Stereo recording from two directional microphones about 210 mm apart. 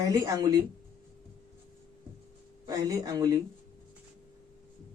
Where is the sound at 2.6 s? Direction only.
15° right (ahead or behind).